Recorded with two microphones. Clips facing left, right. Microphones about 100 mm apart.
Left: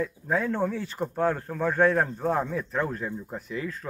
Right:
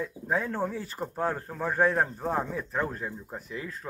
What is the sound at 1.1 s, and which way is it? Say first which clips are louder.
A man's voice: left 4 dB; 15° right (ahead or behind).